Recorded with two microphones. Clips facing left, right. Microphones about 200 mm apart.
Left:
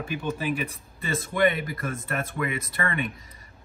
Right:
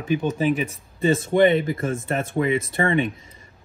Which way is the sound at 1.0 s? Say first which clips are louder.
Right 7 dB; 30° right (ahead or behind).